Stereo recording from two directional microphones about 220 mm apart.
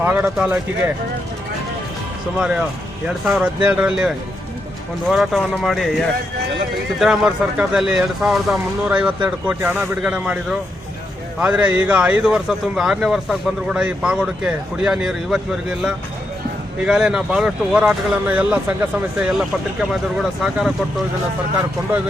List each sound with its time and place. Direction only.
0.0 s speech: 5° right (ahead or behind)
2.4 s speech: 5° right (ahead or behind)
16.8 s speech: centre (ahead or behind)
19.9 s speech: centre (ahead or behind)